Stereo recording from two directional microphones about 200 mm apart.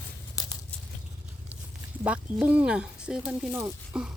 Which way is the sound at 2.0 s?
5° right (ahead or behind).